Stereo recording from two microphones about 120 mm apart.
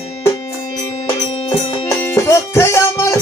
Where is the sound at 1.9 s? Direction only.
20° left (ahead or behind).